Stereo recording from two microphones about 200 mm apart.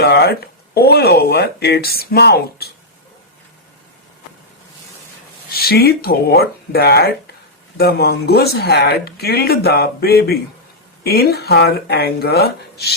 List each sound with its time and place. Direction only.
0.0 s speech: 55° left (ahead or behind)
5.5 s speech: 50° left (ahead or behind)